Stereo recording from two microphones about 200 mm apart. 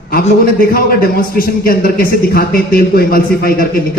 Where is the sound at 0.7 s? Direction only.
50° left (ahead or behind).